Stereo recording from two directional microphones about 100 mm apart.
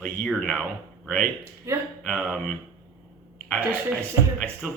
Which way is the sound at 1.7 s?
25° right (ahead or behind).